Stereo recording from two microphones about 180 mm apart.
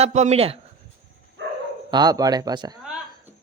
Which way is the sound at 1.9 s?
20° right (ahead or behind).